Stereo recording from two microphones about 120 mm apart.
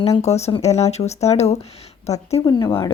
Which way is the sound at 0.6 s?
65° left (ahead or behind).